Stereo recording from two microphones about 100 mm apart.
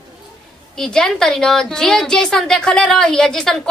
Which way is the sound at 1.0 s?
5° left (ahead or behind).